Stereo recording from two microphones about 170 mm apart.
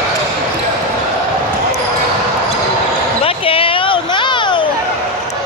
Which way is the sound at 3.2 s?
35° left (ahead or behind).